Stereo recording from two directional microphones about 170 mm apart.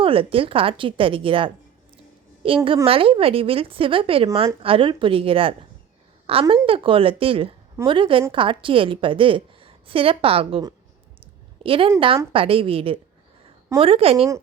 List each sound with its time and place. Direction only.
0.0 s a woman's voice: 30° right (ahead or behind)
11.6 s a woman's voice: 30° right (ahead or behind)